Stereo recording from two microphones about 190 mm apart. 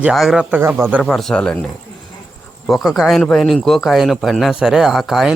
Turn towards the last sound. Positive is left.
turn(degrees=0)  # may be behind; listen again after turning